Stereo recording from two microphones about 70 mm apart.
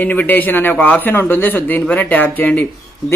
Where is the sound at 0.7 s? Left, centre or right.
Centre.